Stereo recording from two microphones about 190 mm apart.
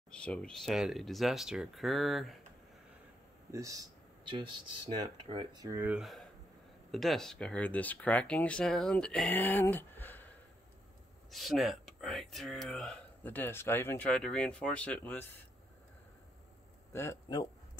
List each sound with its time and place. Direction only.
0.1 s speech: 5° left (ahead or behind)
3.5 s speech: 15° right (ahead or behind); by 10.2 s 10° left (ahead or behind)
11.2 s speech: centre (ahead or behind)
16.9 s speech: 15° left (ahead or behind)